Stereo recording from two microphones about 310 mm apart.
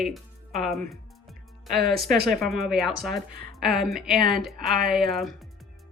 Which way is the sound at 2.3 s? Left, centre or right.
Centre.